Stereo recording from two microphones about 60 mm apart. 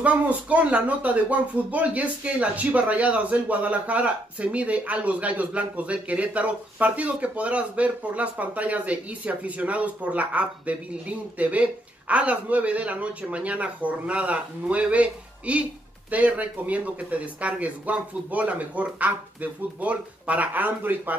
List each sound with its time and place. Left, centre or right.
0.0 s speech: right